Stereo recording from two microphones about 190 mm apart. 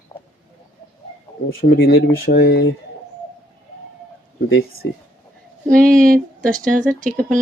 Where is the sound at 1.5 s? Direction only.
55° left (ahead or behind).